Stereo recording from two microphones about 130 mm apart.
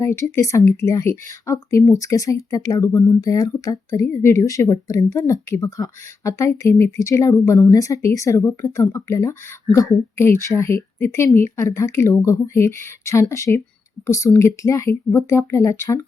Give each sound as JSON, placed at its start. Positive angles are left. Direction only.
{"t": 0.2, "sound": "a woman's voice", "side_deg": 20}